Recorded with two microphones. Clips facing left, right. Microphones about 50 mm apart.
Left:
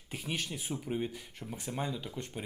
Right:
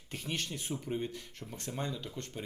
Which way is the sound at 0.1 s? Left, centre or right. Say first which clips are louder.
Left 1 dB; centre.